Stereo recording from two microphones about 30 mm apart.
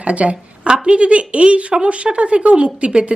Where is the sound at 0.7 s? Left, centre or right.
Right.